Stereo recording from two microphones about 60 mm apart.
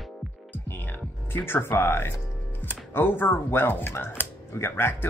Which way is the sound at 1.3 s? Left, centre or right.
Left.